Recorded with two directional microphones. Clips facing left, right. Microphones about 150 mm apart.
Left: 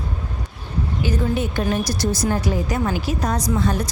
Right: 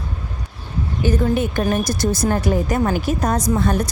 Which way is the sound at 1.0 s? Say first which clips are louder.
Right 4 dB; 50° right (ahead or behind).